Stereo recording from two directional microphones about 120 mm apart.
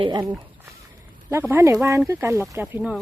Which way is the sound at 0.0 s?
40° right (ahead or behind).